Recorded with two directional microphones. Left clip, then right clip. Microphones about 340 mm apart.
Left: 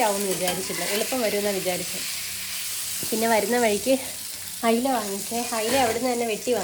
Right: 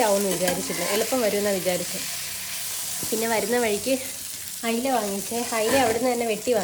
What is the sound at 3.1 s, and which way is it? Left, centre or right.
Speech, centre.